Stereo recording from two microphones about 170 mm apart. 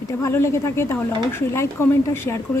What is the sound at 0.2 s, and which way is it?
Speech, 15° left (ahead or behind).